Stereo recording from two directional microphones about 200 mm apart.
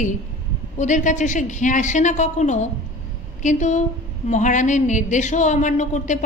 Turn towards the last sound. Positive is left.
turn(degrees=35)  # may be behind; listen again after turning